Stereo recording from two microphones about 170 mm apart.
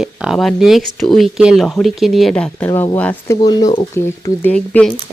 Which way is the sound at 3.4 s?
25° left (ahead or behind).